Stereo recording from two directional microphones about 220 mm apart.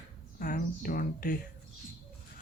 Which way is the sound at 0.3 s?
40° left (ahead or behind).